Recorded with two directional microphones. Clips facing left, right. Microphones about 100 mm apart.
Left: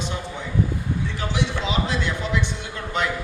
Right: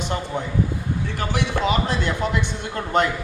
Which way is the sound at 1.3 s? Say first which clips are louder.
Right 5 dB; 50° right (ahead or behind).